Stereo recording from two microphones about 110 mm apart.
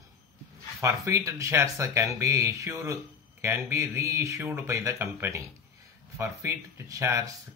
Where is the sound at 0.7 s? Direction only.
25° right (ahead or behind).